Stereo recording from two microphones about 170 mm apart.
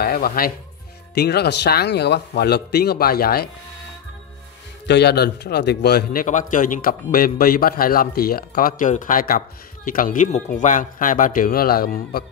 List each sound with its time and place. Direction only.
0.0 s speech: 60° left (ahead or behind)
1.1 s speech: 70° left (ahead or behind)
4.8 s speech: 80° left
6.2 s a man's voice: 50° left (ahead or behind)